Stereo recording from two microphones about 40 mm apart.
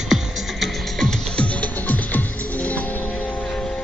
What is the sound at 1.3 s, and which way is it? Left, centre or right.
Music, left.